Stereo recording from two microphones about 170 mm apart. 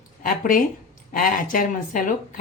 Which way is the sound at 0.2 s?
55° left (ahead or behind).